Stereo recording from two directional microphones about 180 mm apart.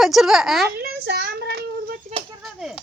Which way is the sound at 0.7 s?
65° right (ahead or behind).